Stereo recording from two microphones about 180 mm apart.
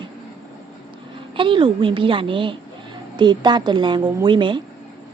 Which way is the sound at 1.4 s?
30° right (ahead or behind).